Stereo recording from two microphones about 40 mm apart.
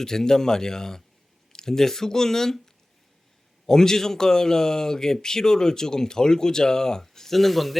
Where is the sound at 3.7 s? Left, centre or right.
Centre.